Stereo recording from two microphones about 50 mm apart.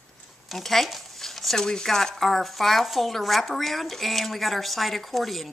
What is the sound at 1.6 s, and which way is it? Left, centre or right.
Speech, centre.